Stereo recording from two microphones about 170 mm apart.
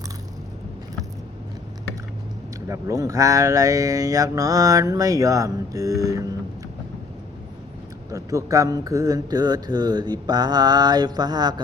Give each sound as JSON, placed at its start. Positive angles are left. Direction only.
{"t": 2.6, "sound": "speech", "side_deg": -15}
{"t": 8.1, "sound": "speech", "side_deg": -20}